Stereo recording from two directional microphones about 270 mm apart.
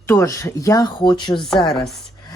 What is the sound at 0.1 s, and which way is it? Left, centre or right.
A woman's voice, centre.